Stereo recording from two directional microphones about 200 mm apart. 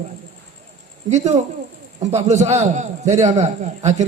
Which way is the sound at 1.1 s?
35° right (ahead or behind).